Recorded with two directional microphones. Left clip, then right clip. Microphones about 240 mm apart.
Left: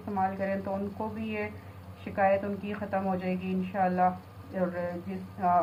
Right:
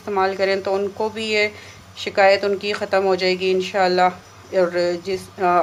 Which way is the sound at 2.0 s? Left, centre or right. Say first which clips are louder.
Right 11 dB; right.